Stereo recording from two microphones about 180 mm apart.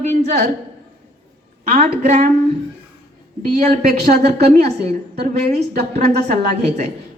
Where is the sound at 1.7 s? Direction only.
45° right (ahead or behind).